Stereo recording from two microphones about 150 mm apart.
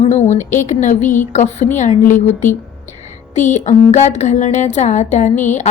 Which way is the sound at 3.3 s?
55° left (ahead or behind).